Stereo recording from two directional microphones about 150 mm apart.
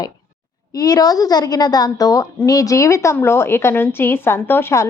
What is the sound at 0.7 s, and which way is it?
A woman's voice, 25° left (ahead or behind).